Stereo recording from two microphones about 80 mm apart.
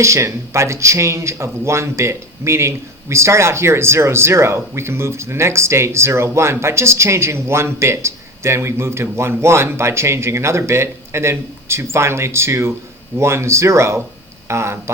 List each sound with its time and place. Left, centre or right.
0.0 s speech: right